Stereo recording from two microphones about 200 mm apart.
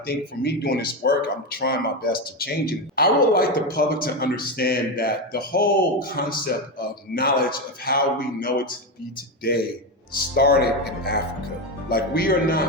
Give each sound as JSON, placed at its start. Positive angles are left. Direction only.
{"t": 0.0, "sound": "speech", "side_deg": 50}
{"t": 10.3, "sound": "speech", "side_deg": 50}